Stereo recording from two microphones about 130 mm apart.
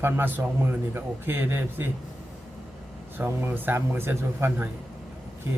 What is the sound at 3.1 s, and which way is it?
A man's voice, 15° right (ahead or behind).